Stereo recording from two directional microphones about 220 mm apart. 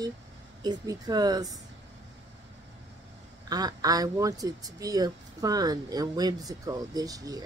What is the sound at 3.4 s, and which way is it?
Speech, 15° right (ahead or behind).